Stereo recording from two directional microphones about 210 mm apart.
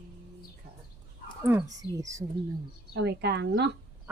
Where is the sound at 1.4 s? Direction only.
10° right (ahead or behind).